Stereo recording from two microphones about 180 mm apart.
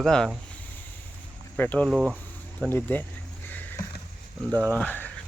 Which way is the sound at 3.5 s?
10° left (ahead or behind).